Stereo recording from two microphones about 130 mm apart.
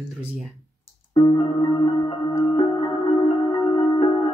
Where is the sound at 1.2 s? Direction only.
30° left (ahead or behind).